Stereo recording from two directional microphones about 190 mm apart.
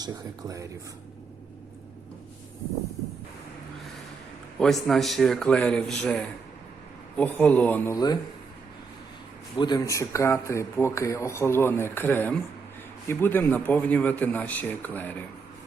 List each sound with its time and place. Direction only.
0.0 s speech: 20° right (ahead or behind)
4.6 s a man's voice: centre (ahead or behind)
7.9 s speech: 20° left (ahead or behind)
9.6 s speech: 20° left (ahead or behind)